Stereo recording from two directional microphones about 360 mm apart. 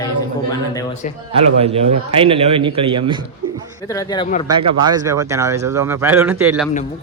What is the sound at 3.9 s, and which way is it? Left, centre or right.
Speech, centre.